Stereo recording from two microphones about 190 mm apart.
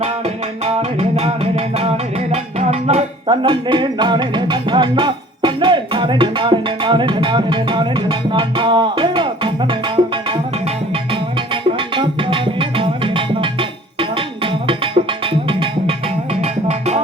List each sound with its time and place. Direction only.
0.6 s music: 35° right (ahead or behind)
11.8 s tabla: 25° right (ahead or behind)